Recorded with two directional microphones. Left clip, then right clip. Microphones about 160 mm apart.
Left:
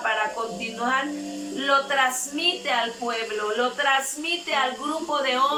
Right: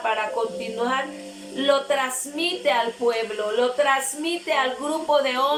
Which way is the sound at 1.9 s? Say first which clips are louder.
Left 1 dB; 25° right (ahead or behind).